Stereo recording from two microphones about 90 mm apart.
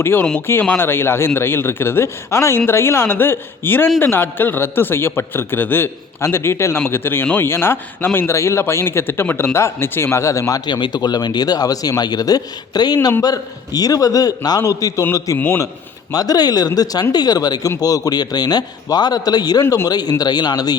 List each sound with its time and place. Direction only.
0.0 s a man's voice: 25° left (ahead or behind)
10.7 s a man's voice: 60° left (ahead or behind); by 15.0 s 40° left (ahead or behind)
15.4 s a man's voice: 20° left (ahead or behind)
16.1 s speech: 45° left (ahead or behind)
19.6 s a man's voice: 30° left (ahead or behind)
19.9 s speech: 50° left (ahead or behind)